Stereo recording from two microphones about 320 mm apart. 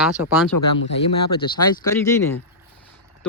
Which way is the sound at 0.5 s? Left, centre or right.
Left.